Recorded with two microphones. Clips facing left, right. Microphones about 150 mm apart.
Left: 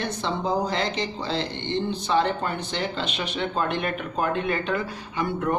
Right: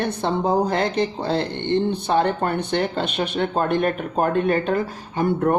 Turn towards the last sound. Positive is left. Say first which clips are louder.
# right 6 dB
turn(degrees=-45)  # may be behind; listen again after turning